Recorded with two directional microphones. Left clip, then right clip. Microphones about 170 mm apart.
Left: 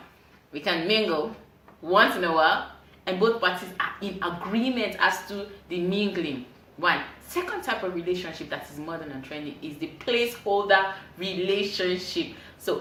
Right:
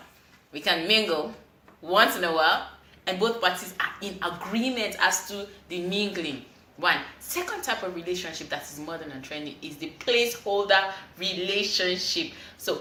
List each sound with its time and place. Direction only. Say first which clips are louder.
0.5 s speech: right 1 dB; centre (ahead or behind)
7.3 s speech: left 1 dB; centre (ahead or behind)